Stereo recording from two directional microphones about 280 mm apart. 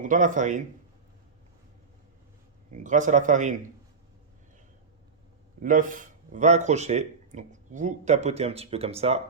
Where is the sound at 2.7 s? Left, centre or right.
Right.